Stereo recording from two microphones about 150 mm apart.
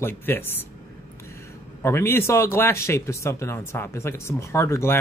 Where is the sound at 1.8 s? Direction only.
15° left (ahead or behind).